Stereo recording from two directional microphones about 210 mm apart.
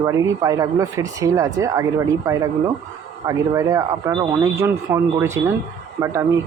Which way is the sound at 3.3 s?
15° right (ahead or behind).